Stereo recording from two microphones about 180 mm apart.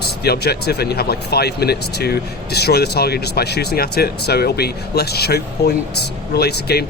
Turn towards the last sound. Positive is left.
turn(degrees=60)  # may be behind; listen again after turning